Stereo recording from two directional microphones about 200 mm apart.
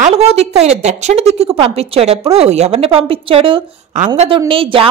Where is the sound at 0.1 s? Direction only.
30° right (ahead or behind).